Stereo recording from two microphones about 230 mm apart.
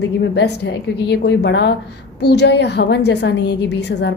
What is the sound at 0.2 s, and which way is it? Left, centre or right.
A woman's voice, left.